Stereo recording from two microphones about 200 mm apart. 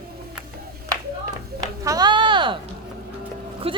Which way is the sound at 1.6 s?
20° right (ahead or behind).